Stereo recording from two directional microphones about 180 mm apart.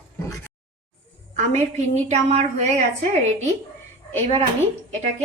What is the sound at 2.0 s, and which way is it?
Speech, 40° right (ahead or behind).